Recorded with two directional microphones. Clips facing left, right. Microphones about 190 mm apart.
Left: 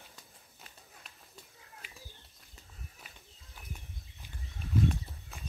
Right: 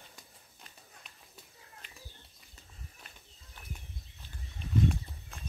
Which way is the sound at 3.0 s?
5° left (ahead or behind).